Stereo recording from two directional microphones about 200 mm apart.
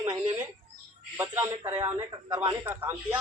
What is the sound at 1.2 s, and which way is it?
A man's voice, 10° right (ahead or behind).